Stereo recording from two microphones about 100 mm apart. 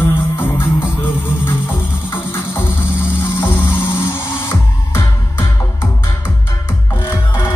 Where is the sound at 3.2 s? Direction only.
25° left (ahead or behind).